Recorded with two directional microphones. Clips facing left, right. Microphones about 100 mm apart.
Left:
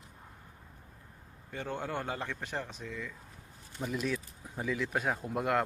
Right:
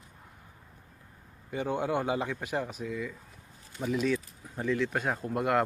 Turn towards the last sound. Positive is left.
turn(degrees=0)  # may be behind; listen again after turning